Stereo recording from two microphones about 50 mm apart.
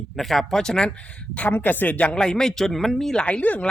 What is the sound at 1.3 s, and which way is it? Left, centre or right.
Speech, left.